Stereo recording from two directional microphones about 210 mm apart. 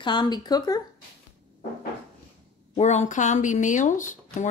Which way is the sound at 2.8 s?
35° left (ahead or behind).